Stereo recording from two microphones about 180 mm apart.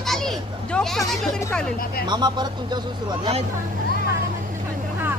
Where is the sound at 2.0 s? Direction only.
25° right (ahead or behind).